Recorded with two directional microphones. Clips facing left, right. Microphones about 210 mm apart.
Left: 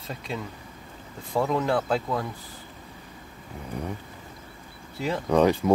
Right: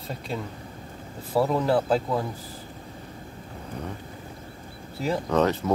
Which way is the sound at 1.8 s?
35° right (ahead or behind).